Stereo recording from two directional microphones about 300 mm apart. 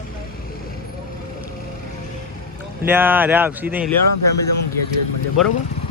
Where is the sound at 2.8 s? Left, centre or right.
Centre.